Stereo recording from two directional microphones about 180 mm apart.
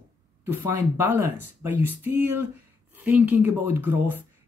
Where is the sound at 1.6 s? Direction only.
10° right (ahead or behind).